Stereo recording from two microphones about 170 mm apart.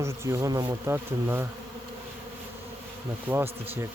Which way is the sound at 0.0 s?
20° right (ahead or behind).